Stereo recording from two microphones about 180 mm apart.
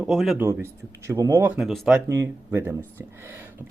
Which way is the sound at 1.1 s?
15° right (ahead or behind).